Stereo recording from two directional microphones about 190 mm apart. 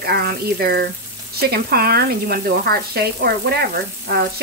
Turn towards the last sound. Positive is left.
turn(degrees=-55)  # may be behind; listen again after turning